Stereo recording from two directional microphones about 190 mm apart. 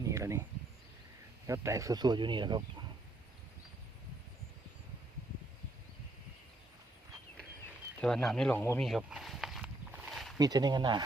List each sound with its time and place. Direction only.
0.1 s a sound: 15° right (ahead or behind)
1.5 s speech: 15° right (ahead or behind)
8.0 s speech: centre (ahead or behind)
8.8 s walk: 5° right (ahead or behind)
10.3 s speech: 20° right (ahead or behind)